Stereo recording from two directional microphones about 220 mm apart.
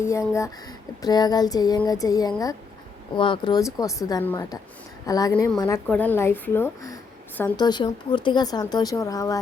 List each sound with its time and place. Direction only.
0.0 s speech: 15° left (ahead or behind)